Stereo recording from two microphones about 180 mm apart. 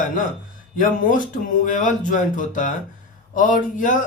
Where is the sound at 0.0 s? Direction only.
45° left (ahead or behind).